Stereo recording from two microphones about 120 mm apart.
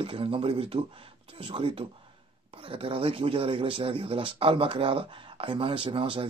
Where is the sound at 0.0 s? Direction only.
50° right (ahead or behind).